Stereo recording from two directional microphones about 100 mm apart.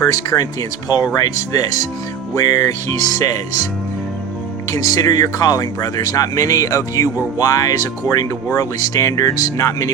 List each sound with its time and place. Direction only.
0.0 s speech: 35° left (ahead or behind)
4.7 s speech: 35° left (ahead or behind)